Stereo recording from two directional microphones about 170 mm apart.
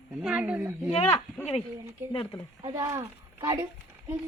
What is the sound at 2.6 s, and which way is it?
Speech, 20° right (ahead or behind).